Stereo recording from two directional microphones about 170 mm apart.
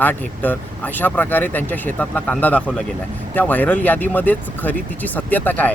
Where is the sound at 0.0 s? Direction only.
10° left (ahead or behind).